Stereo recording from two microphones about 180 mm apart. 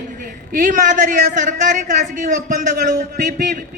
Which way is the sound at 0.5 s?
45° right (ahead or behind).